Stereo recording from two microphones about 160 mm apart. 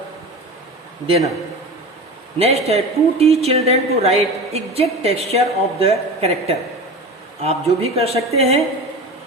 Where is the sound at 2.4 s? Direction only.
40° right (ahead or behind).